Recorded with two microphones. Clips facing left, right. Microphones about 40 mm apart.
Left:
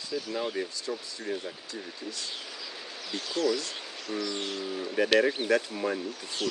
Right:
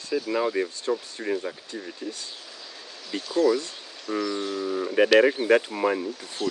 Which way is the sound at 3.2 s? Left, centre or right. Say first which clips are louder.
Right 7 dB; left.